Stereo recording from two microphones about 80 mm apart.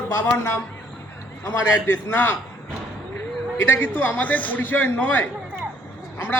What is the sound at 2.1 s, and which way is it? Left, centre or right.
Speech, left.